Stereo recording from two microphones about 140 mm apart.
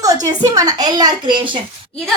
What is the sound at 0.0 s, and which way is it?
A woman's voice, 25° right (ahead or behind).